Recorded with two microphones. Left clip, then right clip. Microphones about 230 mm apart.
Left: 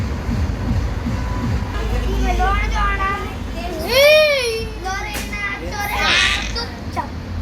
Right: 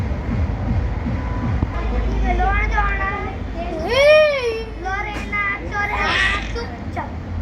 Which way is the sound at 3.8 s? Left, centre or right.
Centre.